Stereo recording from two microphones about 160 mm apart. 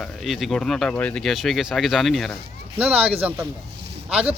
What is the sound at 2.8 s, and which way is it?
Speech, 10° right (ahead or behind).